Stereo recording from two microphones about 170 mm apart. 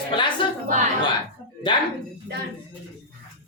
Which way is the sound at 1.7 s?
30° left (ahead or behind).